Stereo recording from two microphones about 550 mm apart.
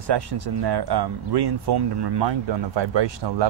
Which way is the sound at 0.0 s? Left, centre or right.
Right.